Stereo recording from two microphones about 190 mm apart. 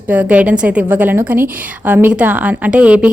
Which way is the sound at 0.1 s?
10° right (ahead or behind).